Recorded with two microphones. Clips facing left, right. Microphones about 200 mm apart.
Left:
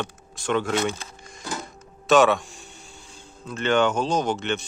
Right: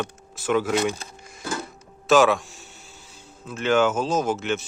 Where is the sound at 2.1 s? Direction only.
Centre (ahead or behind).